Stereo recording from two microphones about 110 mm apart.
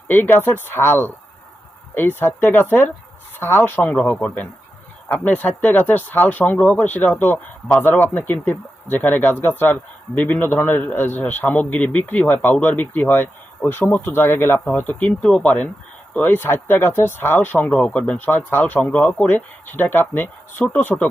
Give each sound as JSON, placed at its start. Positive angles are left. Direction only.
{"t": 0.1, "sound": "speech", "side_deg": 20}